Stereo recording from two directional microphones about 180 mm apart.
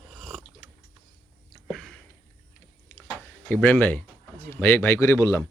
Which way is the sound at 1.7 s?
Centre (ahead or behind).